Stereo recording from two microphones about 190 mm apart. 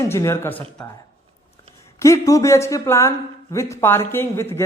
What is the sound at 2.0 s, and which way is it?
Speech, 15° left (ahead or behind).